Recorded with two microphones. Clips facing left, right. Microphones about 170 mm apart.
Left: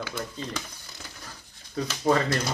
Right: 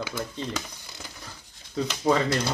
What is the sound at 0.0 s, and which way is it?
Speech, 10° right (ahead or behind).